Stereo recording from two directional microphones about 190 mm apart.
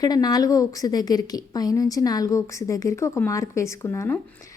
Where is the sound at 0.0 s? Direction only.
20° left (ahead or behind).